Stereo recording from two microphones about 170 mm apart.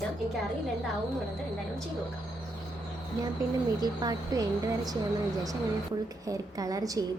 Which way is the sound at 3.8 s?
25° right (ahead or behind).